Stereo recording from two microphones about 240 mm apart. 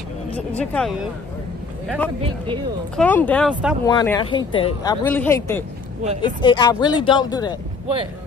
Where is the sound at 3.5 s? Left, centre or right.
Centre.